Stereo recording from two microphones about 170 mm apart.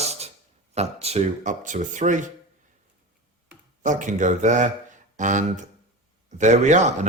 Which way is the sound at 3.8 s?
50° right (ahead or behind).